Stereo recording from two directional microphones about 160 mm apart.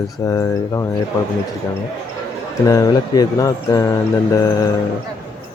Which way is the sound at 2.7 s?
20° left (ahead or behind).